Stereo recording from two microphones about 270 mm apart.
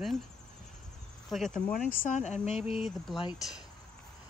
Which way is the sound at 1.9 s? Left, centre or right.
Left.